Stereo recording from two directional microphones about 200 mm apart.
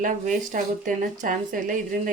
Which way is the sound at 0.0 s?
40° right (ahead or behind).